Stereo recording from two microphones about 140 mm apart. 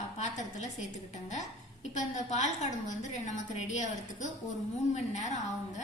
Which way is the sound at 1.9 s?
60° left (ahead or behind).